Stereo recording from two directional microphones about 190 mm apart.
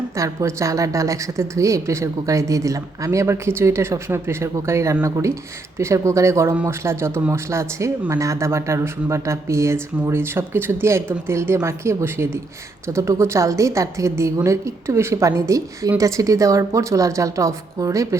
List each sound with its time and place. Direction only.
0.2 s a woman's voice: 15° right (ahead or behind)